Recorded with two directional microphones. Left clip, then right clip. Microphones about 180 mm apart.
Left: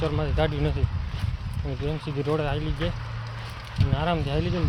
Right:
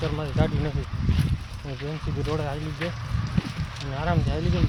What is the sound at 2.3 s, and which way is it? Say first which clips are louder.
Speech: left 3 dB; 25° left (ahead or behind).